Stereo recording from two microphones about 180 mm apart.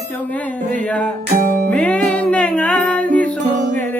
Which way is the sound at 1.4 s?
50° right (ahead or behind).